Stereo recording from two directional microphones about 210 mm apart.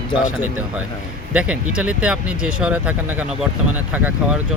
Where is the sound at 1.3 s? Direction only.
5° right (ahead or behind).